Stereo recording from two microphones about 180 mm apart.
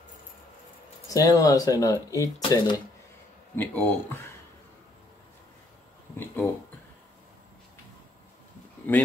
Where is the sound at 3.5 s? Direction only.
10° left (ahead or behind).